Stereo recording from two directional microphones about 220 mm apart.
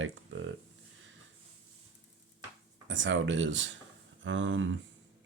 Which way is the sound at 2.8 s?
60° right (ahead or behind).